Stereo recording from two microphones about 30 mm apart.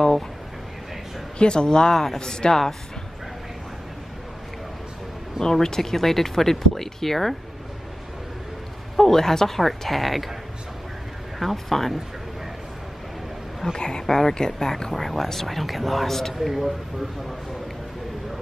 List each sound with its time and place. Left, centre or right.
1.4 s speech: left
5.4 s speech: centre
8.9 s speech: centre
9.6 s a woman's voice: centre
11.3 s a woman's voice: centre
13.7 s speech: left
14.0 s speech: centre
16.3 s a woman's voice: centre